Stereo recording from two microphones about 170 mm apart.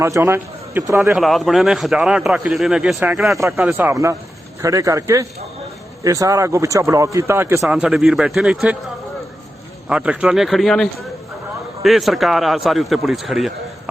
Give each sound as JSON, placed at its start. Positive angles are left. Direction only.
{"t": 0.0, "sound": "a man's voice", "side_deg": -15}
{"t": 1.1, "sound": "a man's voice", "side_deg": 0}
{"t": 3.3, "sound": "a man's voice", "side_deg": -15}
{"t": 7.6, "sound": "a man's voice", "side_deg": -5}
{"t": 9.9, "sound": "a man's voice", "side_deg": -5}